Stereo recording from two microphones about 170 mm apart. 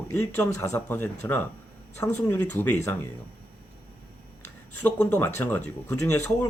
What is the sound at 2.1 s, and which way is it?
Speech, 15° left (ahead or behind).